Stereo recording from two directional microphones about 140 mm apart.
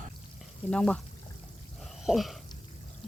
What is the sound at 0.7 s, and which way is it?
Speech, 5° left (ahead or behind).